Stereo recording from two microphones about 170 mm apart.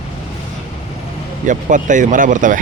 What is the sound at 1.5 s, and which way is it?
Speech, 50° right (ahead or behind).